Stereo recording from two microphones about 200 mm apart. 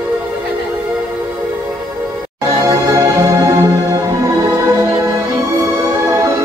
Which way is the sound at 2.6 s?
15° right (ahead or behind).